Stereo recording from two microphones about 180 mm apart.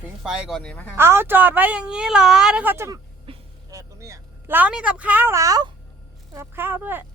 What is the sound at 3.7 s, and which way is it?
A woman's voice, 15° right (ahead or behind).